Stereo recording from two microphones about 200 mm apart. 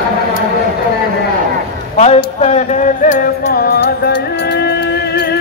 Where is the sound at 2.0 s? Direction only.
35° left (ahead or behind).